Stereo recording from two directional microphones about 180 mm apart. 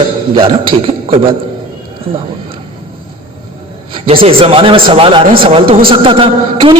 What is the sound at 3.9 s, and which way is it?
Speech, 30° right (ahead or behind).